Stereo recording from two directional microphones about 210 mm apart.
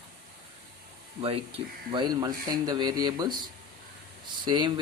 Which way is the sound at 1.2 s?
25° right (ahead or behind).